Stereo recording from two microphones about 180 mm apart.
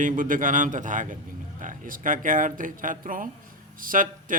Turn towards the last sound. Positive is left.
turn(degrees=-50)  # may be behind; listen again after turning